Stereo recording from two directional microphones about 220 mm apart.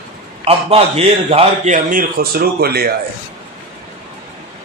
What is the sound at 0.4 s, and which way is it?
A man's voice, 25° right (ahead or behind).